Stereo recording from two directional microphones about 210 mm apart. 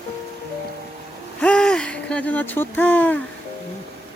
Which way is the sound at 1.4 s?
5° left (ahead or behind).